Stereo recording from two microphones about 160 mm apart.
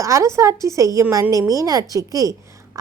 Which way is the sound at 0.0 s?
20° right (ahead or behind).